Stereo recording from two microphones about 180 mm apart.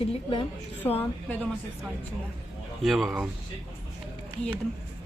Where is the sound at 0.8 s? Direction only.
10° left (ahead or behind).